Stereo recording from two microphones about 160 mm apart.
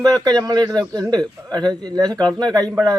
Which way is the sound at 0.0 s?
25° right (ahead or behind).